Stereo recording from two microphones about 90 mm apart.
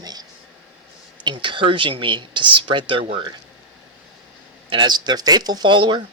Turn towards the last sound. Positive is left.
turn(degrees=-60)  # may be behind; listen again after turning